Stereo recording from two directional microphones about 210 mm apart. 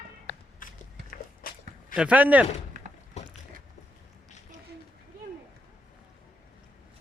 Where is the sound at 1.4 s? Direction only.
45° left (ahead or behind).